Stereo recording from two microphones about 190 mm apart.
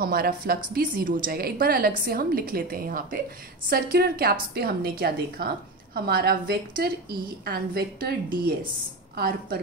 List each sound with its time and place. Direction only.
0.0 s a woman's voice: 50° right (ahead or behind)